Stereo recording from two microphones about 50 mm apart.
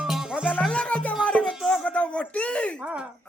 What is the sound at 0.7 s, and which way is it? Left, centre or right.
Music, left.